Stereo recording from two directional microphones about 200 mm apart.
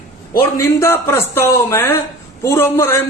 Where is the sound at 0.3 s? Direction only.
15° left (ahead or behind).